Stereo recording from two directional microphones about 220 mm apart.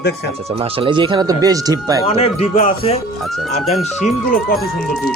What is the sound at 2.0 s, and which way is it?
Speech, 25° left (ahead or behind).